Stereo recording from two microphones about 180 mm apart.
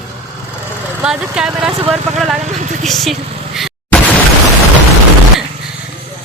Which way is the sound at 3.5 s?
Centre (ahead or behind).